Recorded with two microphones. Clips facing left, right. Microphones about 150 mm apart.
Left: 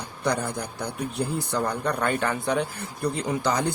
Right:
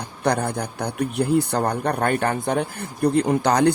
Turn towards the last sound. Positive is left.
turn(degrees=-65)  # may be behind; listen again after turning